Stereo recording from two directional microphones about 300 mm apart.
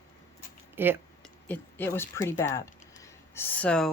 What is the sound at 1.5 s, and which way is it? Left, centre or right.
Speech, centre.